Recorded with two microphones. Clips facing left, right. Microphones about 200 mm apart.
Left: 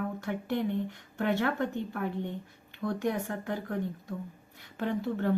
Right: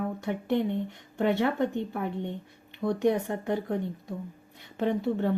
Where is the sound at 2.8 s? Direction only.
20° right (ahead or behind).